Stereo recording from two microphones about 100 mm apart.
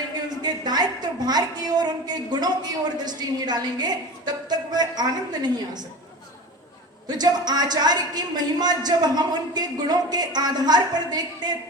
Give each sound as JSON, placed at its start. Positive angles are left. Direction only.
{"t": 0.4, "sound": "a woman's voice", "side_deg": -45}
{"t": 7.2, "sound": "speech", "side_deg": -45}